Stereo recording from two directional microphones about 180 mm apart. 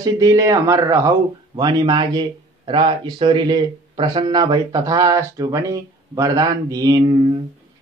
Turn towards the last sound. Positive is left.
turn(degrees=-25)  # may be behind; listen again after turning